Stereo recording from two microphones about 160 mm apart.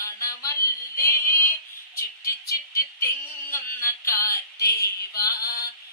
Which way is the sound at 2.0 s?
20° left (ahead or behind).